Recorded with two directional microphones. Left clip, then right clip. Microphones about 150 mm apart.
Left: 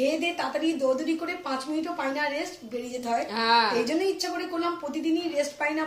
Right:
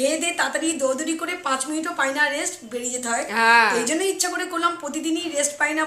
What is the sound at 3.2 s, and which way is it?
Speech, 15° right (ahead or behind).